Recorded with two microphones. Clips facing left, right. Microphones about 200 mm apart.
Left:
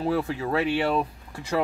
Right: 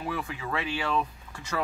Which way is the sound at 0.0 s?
35° left (ahead or behind).